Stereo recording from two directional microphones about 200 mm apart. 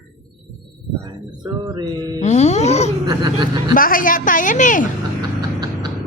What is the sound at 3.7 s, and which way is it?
A woman's voice, 45° left (ahead or behind).